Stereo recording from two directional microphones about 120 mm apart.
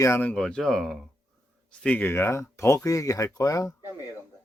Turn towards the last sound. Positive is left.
turn(degrees=30)  # may be behind; listen again after turning